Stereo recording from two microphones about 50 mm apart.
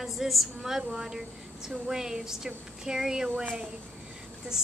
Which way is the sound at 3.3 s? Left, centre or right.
Right.